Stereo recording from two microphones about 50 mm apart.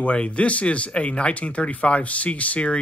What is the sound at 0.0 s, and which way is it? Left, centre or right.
Speech, left.